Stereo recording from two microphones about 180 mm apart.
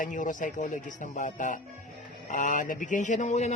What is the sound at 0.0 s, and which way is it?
A man's voice, 45° left (ahead or behind).